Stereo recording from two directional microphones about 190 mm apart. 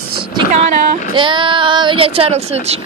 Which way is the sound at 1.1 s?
25° right (ahead or behind).